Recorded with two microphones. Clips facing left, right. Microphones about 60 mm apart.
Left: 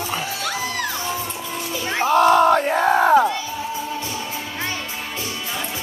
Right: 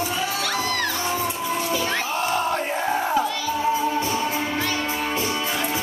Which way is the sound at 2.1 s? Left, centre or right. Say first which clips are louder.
Left 14 dB; left.